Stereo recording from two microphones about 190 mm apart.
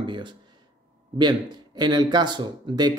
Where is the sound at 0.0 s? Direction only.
25° right (ahead or behind).